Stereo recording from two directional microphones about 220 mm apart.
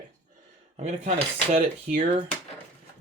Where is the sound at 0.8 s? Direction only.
35° right (ahead or behind).